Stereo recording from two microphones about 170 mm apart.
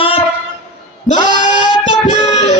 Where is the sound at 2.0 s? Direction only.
45° left (ahead or behind).